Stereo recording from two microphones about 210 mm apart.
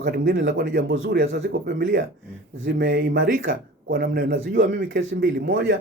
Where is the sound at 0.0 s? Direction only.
55° right (ahead or behind).